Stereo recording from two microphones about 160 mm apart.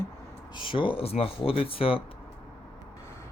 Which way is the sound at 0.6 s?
30° left (ahead or behind).